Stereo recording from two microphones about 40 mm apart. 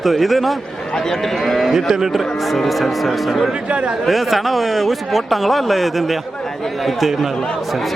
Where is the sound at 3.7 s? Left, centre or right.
Right.